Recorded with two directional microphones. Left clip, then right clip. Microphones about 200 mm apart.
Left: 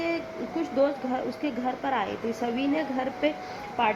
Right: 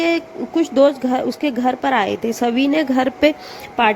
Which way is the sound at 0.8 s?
55° right (ahead or behind).